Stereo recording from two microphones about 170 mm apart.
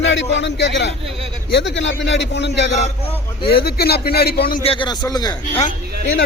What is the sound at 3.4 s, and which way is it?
A man's voice, 65° left (ahead or behind).